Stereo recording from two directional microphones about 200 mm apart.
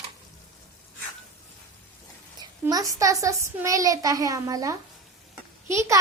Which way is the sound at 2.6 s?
15° right (ahead or behind).